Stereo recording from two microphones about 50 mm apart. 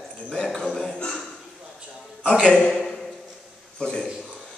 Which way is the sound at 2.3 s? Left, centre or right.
Centre.